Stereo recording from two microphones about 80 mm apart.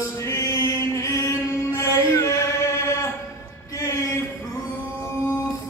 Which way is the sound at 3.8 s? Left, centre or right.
Left.